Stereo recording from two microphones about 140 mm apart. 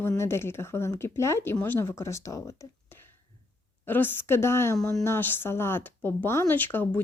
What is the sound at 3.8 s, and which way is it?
A woman's voice, 15° left (ahead or behind).